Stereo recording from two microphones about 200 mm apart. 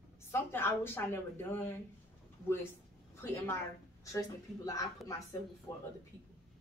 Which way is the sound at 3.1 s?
15° left (ahead or behind).